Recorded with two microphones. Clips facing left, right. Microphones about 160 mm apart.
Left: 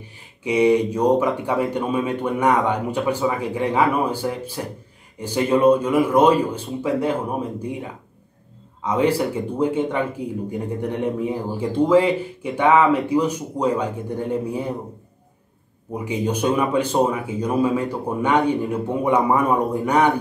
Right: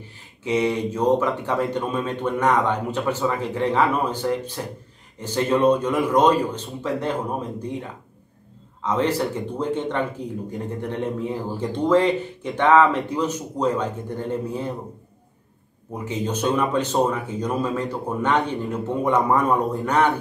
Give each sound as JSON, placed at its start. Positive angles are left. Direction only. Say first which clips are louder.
{"t": 0.4, "sound": "speech", "louder": "left 5 dB", "side_deg": 15}
{"t": 15.9, "sound": "speech", "louder": "left 3 dB", "side_deg": 10}